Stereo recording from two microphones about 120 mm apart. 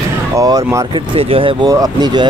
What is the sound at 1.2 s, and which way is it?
Speech, 50° right (ahead or behind).